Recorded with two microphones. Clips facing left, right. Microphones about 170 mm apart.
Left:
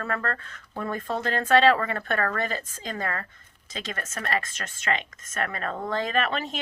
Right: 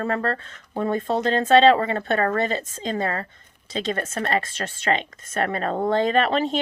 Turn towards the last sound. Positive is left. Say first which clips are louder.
# right 7 dB
turn(degrees=-30)  # may be behind; listen again after turning